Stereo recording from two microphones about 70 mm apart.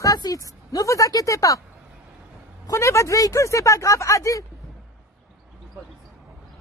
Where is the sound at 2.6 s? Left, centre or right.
Left.